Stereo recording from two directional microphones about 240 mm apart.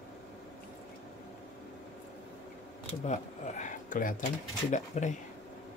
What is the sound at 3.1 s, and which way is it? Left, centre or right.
Speech, left.